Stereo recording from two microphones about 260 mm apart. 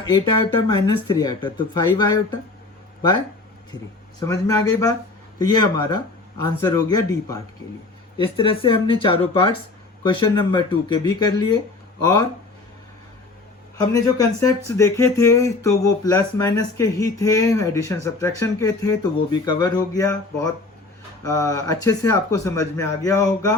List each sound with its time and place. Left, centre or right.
0.1 s speech: centre
4.3 s speech: centre
13.9 s speech: centre